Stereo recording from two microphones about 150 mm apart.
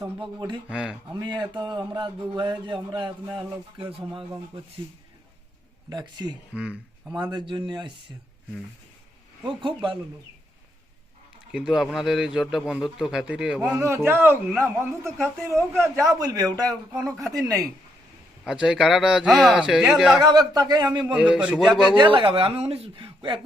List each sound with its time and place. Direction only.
0.2 s speech: 30° right (ahead or behind)
0.7 s a man's voice: 5° right (ahead or behind)
1.1 s speech: 30° right (ahead or behind)
5.9 s a man's voice: 30° right (ahead or behind)
6.6 s speech: 5° right (ahead or behind)
7.2 s speech: 30° right (ahead or behind)
9.4 s speech: 35° right (ahead or behind)
11.5 s a man's voice: 5° right (ahead or behind)
13.6 s a man's voice: 20° right (ahead or behind)
16.9 s a man's voice: centre (ahead or behind)
18.4 s a man's voice: 5° right (ahead or behind)
20.2 s a man's voice: 25° right (ahead or behind)
21.0 s a man's voice: 5° right (ahead or behind)
21.9 s speech: 35° right (ahead or behind)